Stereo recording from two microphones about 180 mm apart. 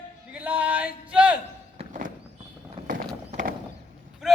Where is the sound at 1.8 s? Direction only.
45° right (ahead or behind).